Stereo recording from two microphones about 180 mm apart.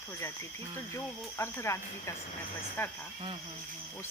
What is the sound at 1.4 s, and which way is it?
Speech, 15° left (ahead or behind).